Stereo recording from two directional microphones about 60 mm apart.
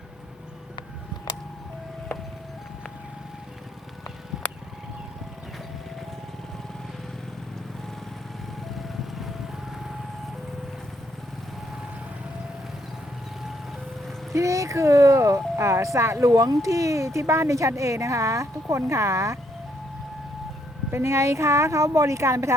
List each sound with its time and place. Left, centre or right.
8.8 s ice cream truck: centre
14.3 s speech: right
20.9 s a woman's voice: right